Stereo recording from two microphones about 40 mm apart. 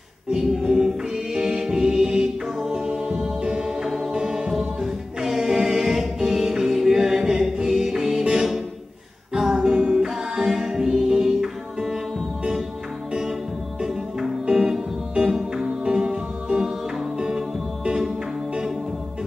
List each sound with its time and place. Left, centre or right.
0.3 s music: centre
3.3 s music: centre
8.2 s music: centre
9.6 s music: right
14.4 s music: centre